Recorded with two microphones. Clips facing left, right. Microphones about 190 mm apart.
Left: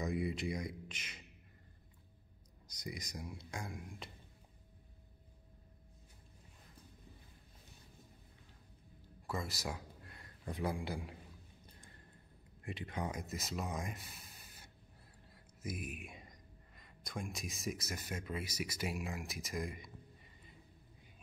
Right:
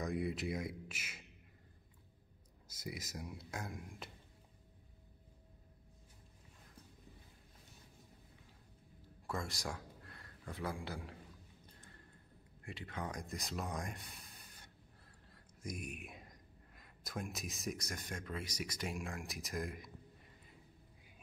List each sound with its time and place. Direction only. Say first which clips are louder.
0.0 s speech: left 1 dB; centre (ahead or behind)
2.7 s speech: even; 5° right (ahead or behind)
9.3 s speech: left 1 dB; 5° left (ahead or behind)
10.0 s a man's voice: left 4 dB; 15° left (ahead or behind)
12.6 s speech: left 3 dB; 20° left (ahead or behind); by 19.9 s centre (ahead or behind)